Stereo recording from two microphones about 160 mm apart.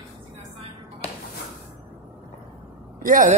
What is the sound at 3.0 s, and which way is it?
Speech, 55° right (ahead or behind).